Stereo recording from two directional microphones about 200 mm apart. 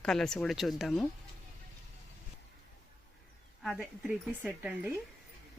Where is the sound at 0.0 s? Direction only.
Centre (ahead or behind).